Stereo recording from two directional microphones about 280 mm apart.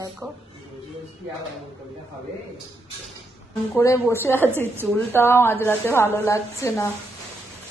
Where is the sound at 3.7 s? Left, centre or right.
Centre.